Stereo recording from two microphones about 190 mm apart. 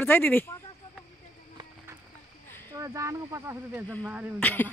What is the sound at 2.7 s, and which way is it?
Speech, 15° right (ahead or behind).